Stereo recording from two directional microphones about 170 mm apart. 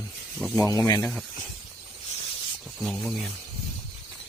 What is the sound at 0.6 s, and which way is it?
Speech, 15° left (ahead or behind).